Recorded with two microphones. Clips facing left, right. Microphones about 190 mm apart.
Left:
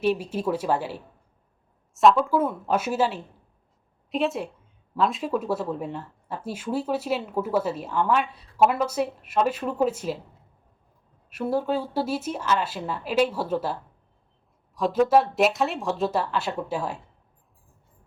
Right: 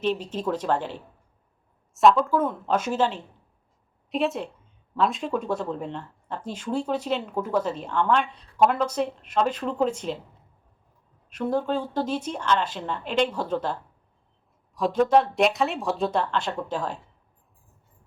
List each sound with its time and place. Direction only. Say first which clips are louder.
0.0 s speech: left 2 dB; 10° left (ahead or behind)
11.3 s speech: even; 5° left (ahead or behind)
14.8 s speech: even; centre (ahead or behind)